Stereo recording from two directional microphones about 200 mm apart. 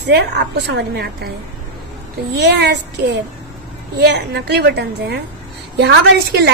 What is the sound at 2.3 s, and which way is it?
A woman's voice, 55° right (ahead or behind).